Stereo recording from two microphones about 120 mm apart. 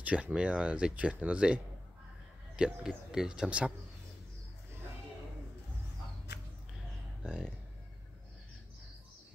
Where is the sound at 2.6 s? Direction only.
5° right (ahead or behind).